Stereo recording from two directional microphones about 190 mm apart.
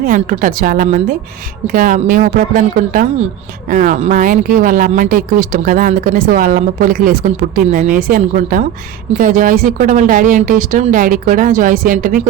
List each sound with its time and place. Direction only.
0.0 s speech: 45° right (ahead or behind)